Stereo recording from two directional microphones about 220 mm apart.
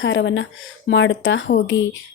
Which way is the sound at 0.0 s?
55° left (ahead or behind).